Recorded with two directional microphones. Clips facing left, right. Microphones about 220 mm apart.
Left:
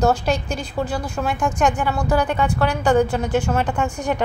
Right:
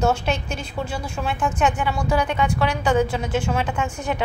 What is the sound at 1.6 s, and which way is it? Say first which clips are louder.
A woman's voice: left 2 dB; 5° left (ahead or behind).